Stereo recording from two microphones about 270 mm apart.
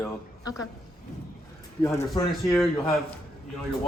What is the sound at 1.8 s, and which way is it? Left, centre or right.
Speech, centre.